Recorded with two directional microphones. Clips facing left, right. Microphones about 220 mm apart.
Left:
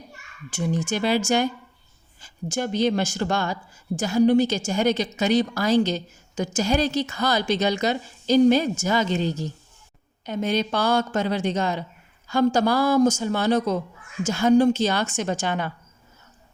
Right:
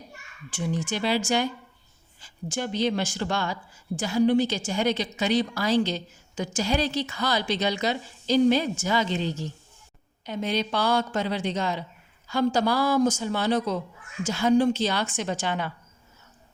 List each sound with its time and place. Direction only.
0.5 s a woman's voice: 45° left (ahead or behind)